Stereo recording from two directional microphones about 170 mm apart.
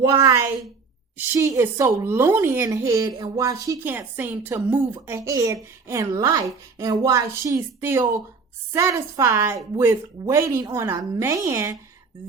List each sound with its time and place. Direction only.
0.1 s a woman's voice: 20° right (ahead or behind)